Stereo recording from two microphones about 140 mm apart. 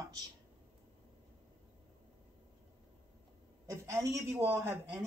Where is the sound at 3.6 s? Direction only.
20° right (ahead or behind).